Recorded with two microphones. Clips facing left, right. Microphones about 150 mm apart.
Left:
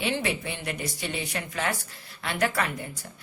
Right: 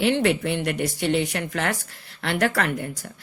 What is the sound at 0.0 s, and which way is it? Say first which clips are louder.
A woman's voice: right 8 dB; 65° right (ahead or behind).